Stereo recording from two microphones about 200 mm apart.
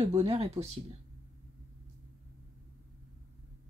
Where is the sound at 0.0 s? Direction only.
30° right (ahead or behind).